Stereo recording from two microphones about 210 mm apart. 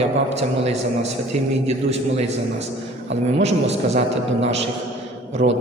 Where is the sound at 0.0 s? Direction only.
30° right (ahead or behind).